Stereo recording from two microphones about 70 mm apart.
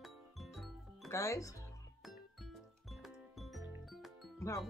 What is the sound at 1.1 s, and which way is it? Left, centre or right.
Speech, left.